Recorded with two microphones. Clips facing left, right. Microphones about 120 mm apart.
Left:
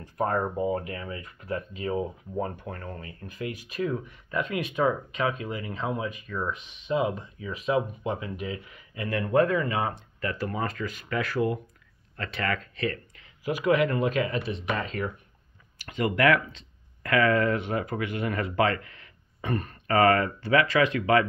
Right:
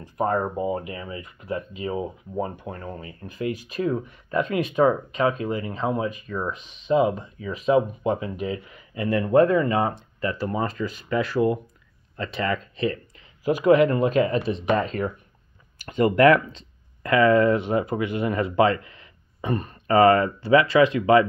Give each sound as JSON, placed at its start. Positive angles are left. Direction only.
{"t": 0.0, "sound": "speech", "side_deg": -15}
{"t": 6.3, "sound": "speech", "side_deg": -25}